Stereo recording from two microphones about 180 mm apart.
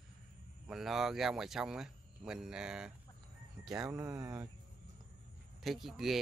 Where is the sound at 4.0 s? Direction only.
20° right (ahead or behind).